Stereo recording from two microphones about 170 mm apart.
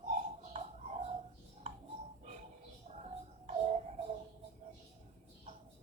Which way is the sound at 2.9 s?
40° right (ahead or behind).